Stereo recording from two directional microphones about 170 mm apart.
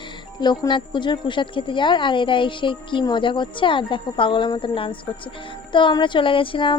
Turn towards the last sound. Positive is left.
turn(degrees=30)  # may be behind; listen again after turning